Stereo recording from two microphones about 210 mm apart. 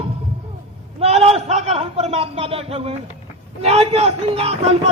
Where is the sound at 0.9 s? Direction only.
30° right (ahead or behind).